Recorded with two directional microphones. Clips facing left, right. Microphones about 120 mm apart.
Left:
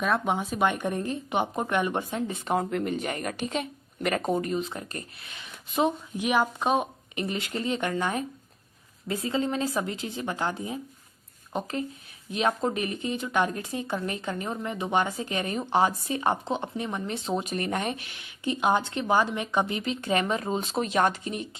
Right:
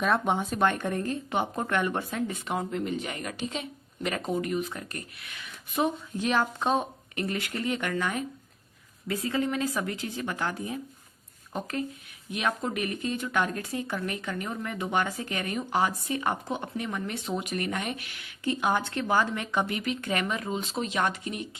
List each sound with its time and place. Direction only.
0.0 s a woman's voice: centre (ahead or behind); by 2.5 s 25° left (ahead or behind)
2.6 s speech: 65° left (ahead or behind)
2.9 s speech: 50° left (ahead or behind)
4.3 s speech: 35° left (ahead or behind)